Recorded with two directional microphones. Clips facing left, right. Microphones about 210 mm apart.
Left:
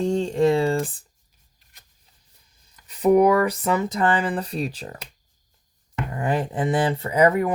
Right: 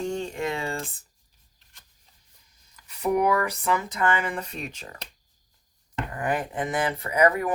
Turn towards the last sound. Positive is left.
turn(degrees=25)  # may be behind; listen again after turning